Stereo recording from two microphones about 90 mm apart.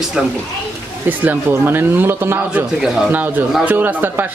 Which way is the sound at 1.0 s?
20° right (ahead or behind).